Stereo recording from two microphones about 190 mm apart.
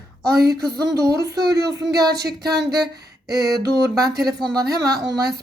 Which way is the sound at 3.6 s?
20° right (ahead or behind).